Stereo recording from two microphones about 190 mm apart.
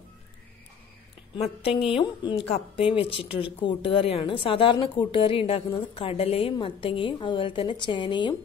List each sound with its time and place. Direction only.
1.3 s a woman's voice: 30° left (ahead or behind)